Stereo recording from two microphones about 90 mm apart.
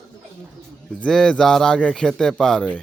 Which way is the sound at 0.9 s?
10° left (ahead or behind).